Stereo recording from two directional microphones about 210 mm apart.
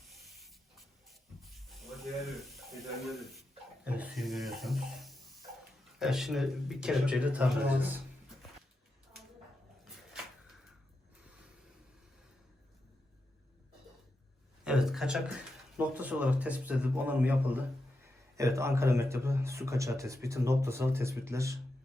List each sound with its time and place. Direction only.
0.1 s spray: centre (ahead or behind)
1.4 s snake: centre (ahead or behind)
3.8 s music: 5° right (ahead or behind)
6.0 s speech: centre (ahead or behind)
14.6 s a sound: 5° right (ahead or behind)
15.8 s a man's voice: 5° right (ahead or behind)